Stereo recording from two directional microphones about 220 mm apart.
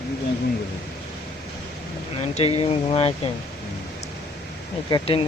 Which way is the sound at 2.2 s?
25° left (ahead or behind).